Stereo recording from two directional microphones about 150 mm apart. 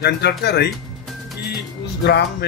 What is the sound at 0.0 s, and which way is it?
Speech, 90° left.